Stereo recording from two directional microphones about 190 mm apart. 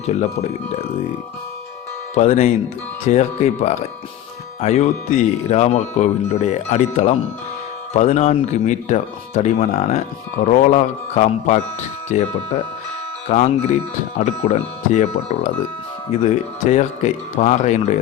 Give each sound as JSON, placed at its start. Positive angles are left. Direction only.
{"t": 2.1, "sound": "speech", "side_deg": 35}
{"t": 13.2, "sound": "speech", "side_deg": 35}